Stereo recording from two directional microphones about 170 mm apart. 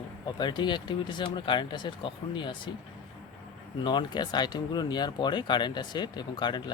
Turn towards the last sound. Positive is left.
turn(degrees=25)  # may be behind; listen again after turning